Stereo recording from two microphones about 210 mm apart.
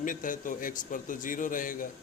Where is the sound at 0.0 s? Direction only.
40° left (ahead or behind).